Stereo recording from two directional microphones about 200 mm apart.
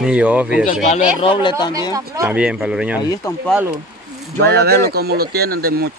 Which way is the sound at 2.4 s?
5° right (ahead or behind).